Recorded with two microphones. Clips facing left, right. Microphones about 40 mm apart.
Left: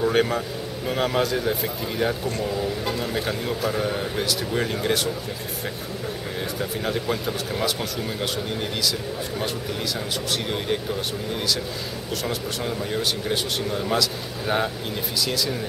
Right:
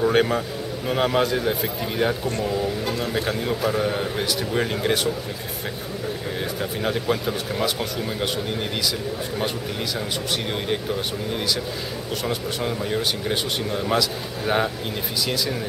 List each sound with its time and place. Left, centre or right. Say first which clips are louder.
0.0 s a man's voice: right 2 dB; centre
2.4 s a man's voice: right 1 dB; centre
6.6 s a man's voice: right 1 dB; centre
12.3 s a man's voice: right 3 dB; centre